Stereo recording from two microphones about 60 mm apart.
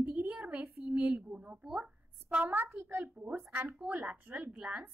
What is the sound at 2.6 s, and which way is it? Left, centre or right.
A child's voice, right.